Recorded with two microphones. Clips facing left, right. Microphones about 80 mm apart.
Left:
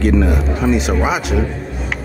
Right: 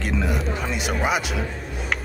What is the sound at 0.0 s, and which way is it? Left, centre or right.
Speech, centre.